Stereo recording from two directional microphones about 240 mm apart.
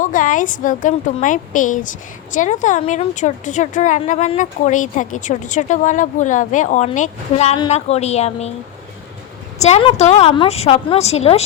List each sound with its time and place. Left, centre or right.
0.0 s a woman's voice: left
9.6 s speech: left